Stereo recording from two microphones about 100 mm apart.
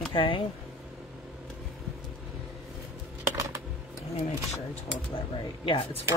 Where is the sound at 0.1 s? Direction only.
60° left (ahead or behind).